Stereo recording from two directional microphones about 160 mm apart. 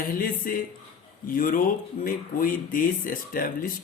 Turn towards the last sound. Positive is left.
turn(degrees=60)  # may be behind; listen again after turning